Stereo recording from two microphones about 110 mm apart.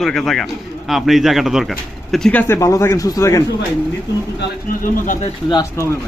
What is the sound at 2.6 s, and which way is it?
Speech, 30° left (ahead or behind).